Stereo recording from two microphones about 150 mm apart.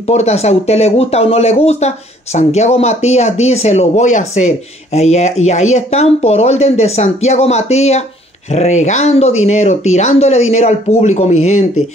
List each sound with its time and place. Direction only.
0.0 s speech: 45° left (ahead or behind)